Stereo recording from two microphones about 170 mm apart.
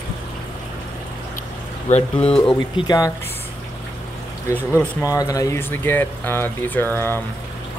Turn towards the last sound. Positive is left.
turn(degrees=15)  # may be behind; listen again after turning